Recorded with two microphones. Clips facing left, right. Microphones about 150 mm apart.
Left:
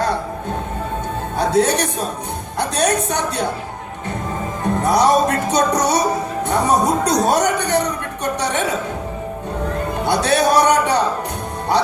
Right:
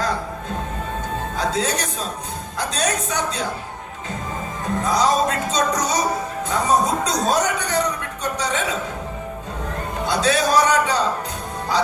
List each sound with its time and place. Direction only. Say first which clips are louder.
1.4 s music: left 8 dB; 60° left (ahead or behind)
2.6 s speech: left 5 dB; 60° left (ahead or behind)
4.8 s music: left 4 dB; 65° left (ahead or behind)
6.5 s speech: left 3 dB; 65° left (ahead or behind)
8.2 s a sound: left 3 dB; 65° left (ahead or behind)
10.1 s music: left 3 dB; 65° left (ahead or behind)